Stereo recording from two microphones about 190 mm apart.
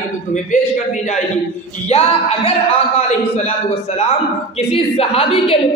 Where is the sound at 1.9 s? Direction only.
35° left (ahead or behind).